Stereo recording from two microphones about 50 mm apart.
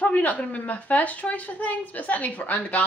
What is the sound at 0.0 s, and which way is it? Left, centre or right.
A woman's voice, left.